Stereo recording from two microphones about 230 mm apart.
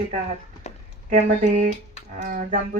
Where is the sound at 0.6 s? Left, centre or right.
Left.